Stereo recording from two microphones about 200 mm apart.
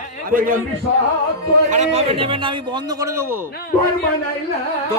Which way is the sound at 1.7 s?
35° right (ahead or behind).